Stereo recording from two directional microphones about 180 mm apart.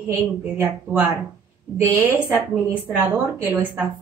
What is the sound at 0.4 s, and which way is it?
A woman's voice, 10° right (ahead or behind).